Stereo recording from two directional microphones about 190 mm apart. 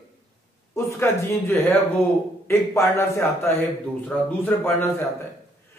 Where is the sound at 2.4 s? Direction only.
15° left (ahead or behind).